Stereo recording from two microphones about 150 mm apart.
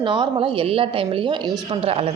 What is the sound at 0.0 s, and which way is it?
A woman's voice, 35° right (ahead or behind).